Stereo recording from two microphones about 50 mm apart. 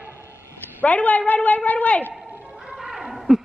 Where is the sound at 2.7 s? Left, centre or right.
Centre.